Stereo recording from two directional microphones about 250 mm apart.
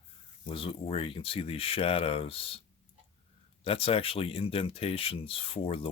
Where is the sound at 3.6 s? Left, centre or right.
Left.